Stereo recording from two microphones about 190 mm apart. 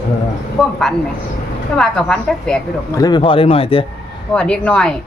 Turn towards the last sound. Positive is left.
turn(degrees=5)  # may be behind; listen again after turning